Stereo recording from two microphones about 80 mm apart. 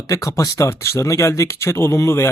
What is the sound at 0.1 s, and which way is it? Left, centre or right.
Speech, left.